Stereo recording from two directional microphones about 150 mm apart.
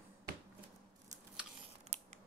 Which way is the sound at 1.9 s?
45° right (ahead or behind).